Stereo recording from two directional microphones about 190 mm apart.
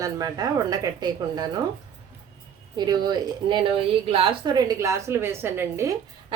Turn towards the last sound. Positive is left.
turn(degrees=-15)  # may be behind; listen again after turning